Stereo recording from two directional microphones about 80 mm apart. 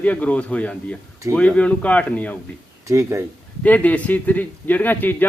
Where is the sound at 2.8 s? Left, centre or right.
Right.